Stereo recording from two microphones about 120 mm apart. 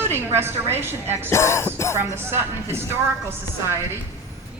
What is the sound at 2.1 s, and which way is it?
Speech, 20° right (ahead or behind).